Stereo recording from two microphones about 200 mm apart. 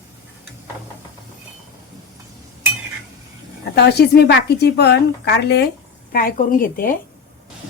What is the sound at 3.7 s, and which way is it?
Speech, 55° left (ahead or behind).